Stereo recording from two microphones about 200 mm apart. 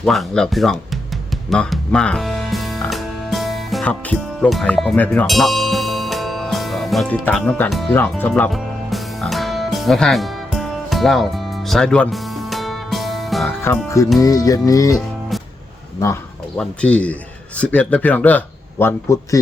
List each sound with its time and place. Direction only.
0.0 s speech: centre (ahead or behind)
1.5 s music: centre (ahead or behind)
13.6 s speech: 15° left (ahead or behind)
16.6 s speech: 5° left (ahead or behind)